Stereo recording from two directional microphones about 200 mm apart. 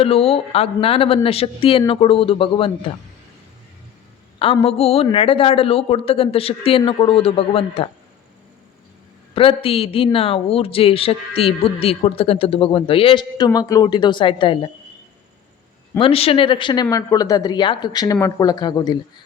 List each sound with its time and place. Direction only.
0.0 s speech: 30° left (ahead or behind)
4.4 s speech: 30° left (ahead or behind)
9.3 s speech: 25° left (ahead or behind)
16.0 s speech: 30° left (ahead or behind)